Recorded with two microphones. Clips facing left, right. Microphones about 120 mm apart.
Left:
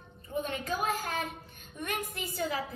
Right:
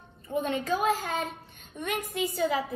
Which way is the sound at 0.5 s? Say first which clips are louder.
Right 7 dB; 25° right (ahead or behind).